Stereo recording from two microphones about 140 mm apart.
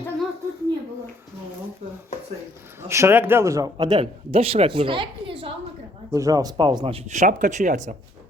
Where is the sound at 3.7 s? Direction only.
30° right (ahead or behind).